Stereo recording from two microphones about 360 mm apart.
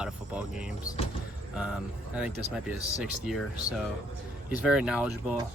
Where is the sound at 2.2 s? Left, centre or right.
Centre.